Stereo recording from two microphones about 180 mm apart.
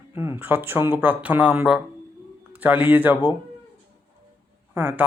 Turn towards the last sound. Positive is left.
turn(degrees=-10)  # may be behind; listen again after turning